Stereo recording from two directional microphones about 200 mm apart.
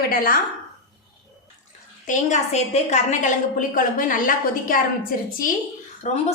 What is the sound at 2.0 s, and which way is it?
A woman's voice, 35° left (ahead or behind).